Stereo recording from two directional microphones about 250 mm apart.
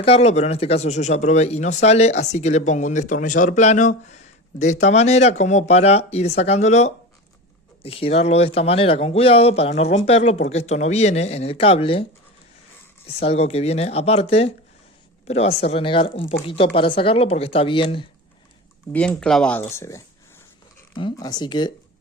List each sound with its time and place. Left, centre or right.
0.0 s speech: left
13.2 s speech: left
18.9 s speech: centre